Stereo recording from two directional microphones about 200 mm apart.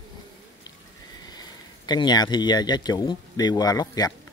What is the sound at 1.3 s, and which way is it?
Speech, 20° left (ahead or behind).